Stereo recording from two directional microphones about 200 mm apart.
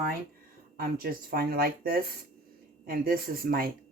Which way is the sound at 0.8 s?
50° right (ahead or behind).